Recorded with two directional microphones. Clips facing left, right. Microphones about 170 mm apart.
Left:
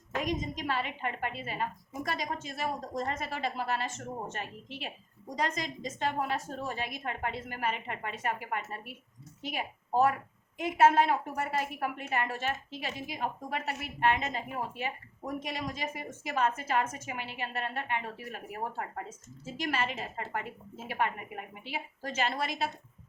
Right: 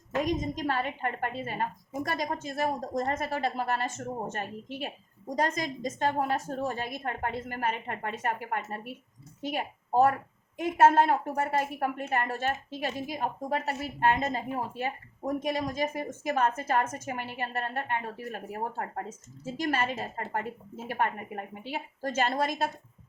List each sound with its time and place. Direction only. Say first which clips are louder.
0.3 s a woman's voice: right 4 dB; 45° right (ahead or behind)
10.6 s a woman's voice: right 2 dB; 45° right (ahead or behind)